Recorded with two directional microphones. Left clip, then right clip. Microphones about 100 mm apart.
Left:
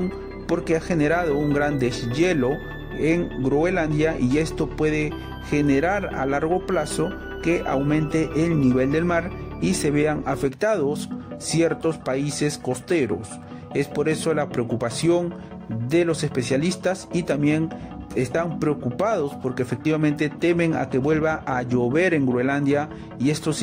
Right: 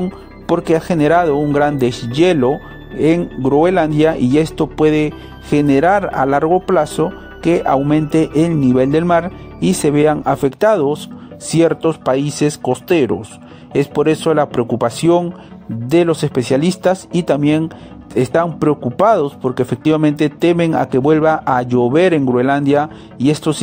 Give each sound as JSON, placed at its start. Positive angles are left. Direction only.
{"t": 0.7, "sound": "speech", "side_deg": -50}